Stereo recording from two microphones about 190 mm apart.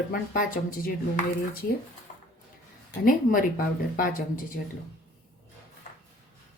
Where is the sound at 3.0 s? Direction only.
50° left (ahead or behind).